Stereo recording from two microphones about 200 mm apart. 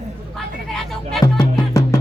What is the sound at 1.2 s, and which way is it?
Music, 20° left (ahead or behind).